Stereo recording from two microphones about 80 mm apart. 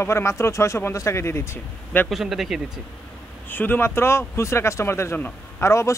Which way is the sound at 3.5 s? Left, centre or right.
Left.